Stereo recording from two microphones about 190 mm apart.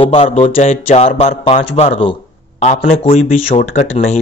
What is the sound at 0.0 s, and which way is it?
A man's voice, 30° left (ahead or behind).